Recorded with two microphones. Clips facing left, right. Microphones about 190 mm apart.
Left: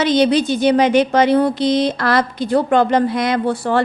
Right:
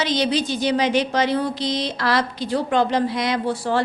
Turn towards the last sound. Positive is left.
turn(degrees=55)  # may be behind; listen again after turning